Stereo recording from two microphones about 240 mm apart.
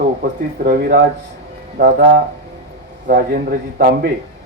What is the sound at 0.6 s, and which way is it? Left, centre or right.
A man's voice, right.